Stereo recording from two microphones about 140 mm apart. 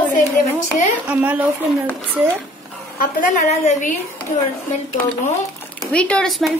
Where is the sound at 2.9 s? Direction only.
65° left (ahead or behind).